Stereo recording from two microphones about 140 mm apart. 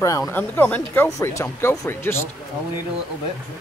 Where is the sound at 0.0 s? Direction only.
25° left (ahead or behind).